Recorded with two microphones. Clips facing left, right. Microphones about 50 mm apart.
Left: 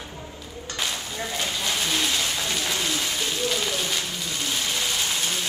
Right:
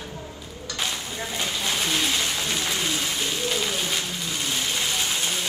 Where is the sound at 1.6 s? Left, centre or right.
Centre.